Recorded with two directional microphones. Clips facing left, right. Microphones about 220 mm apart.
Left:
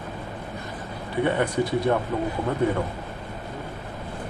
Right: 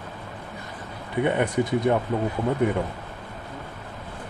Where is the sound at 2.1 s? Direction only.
20° right (ahead or behind).